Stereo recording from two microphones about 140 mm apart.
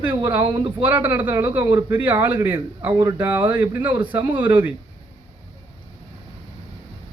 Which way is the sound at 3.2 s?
10° right (ahead or behind).